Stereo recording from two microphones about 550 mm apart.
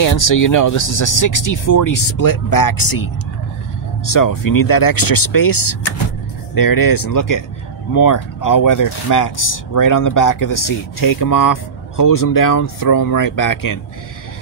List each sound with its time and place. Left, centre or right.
0.0 s speech: left